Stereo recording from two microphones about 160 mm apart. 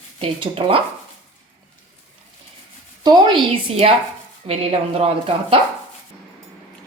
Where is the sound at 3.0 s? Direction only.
30° right (ahead or behind).